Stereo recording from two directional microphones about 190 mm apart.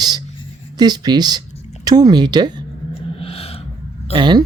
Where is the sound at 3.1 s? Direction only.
30° left (ahead or behind).